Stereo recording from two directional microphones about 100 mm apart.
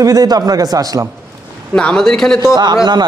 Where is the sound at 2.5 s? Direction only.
50° right (ahead or behind).